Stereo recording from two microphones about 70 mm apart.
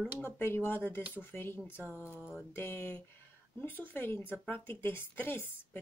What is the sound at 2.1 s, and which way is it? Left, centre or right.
Music, centre.